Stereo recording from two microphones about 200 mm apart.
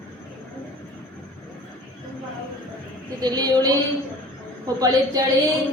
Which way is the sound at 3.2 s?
20° right (ahead or behind).